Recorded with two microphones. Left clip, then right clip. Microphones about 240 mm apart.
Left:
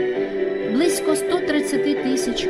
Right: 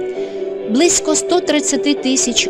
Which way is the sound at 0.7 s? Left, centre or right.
Right.